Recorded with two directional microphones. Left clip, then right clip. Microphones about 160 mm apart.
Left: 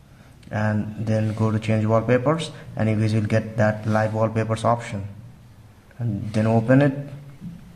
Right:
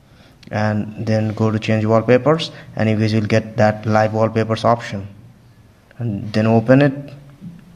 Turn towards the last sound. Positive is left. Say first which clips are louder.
# right 5 dB
turn(degrees=-30)  # may be behind; listen again after turning